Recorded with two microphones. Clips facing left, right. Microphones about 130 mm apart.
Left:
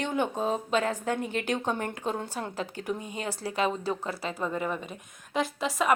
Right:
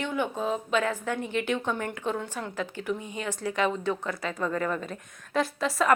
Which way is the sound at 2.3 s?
35° left (ahead or behind).